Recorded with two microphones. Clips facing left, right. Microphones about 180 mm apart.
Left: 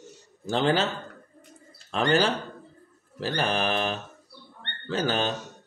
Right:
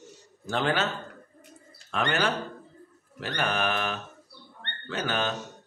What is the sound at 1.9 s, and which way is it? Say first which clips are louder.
Mantra: left 4 dB; 30° left (ahead or behind).